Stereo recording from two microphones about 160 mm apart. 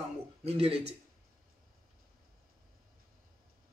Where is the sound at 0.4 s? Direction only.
40° right (ahead or behind).